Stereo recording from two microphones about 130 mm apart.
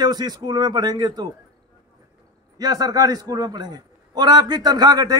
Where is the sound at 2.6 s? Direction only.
30° right (ahead or behind).